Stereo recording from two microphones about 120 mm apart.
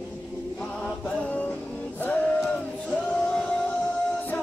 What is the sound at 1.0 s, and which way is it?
Music, 10° left (ahead or behind).